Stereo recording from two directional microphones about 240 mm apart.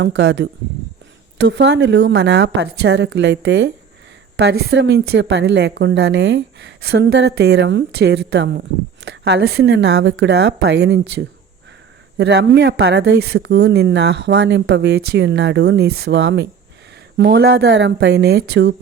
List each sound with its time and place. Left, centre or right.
0.0 s speech: right
12.1 s speech: right